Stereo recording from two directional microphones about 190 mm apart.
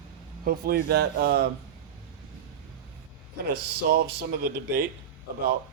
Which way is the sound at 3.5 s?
55° right (ahead or behind).